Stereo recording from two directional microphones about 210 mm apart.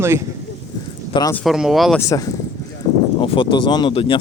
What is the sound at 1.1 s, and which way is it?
Speech, 20° left (ahead or behind).